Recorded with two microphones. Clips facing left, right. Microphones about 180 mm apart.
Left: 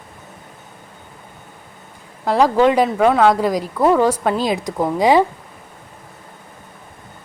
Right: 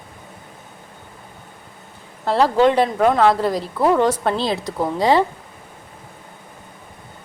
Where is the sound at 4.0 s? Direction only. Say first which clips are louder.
Left 2 dB; 10° left (ahead or behind).